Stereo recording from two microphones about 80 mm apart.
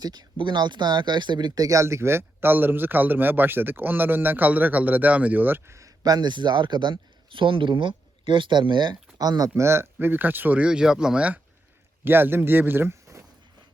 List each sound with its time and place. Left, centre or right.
0.0 s speech: right
6.0 s speech: right
9.1 s speech: right
9.6 s speech: right; by 11.3 s centre
12.0 s speech: right